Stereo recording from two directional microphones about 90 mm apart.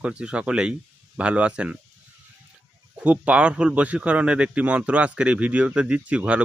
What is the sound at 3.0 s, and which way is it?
A man's voice, 15° right (ahead or behind).